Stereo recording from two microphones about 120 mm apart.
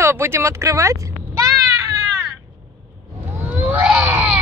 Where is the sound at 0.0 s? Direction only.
20° right (ahead or behind).